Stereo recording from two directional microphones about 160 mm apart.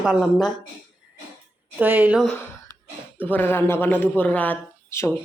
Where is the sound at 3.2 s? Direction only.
10° left (ahead or behind).